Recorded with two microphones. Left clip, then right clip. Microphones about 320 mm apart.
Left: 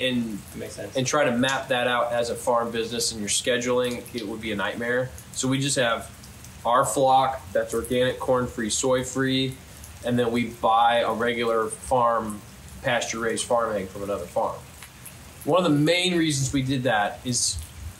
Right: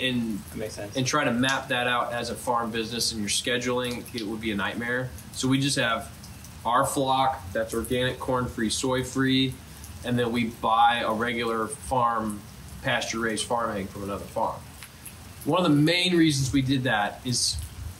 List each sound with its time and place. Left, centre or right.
0.9 s speech: centre
15.5 s speech: centre